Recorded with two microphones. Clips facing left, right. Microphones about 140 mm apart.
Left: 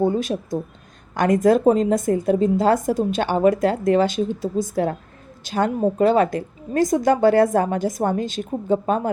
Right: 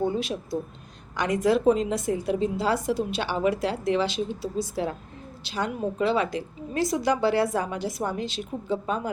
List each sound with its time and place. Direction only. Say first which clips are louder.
0.0 s a woman's voice: left 6 dB; 45° left (ahead or behind)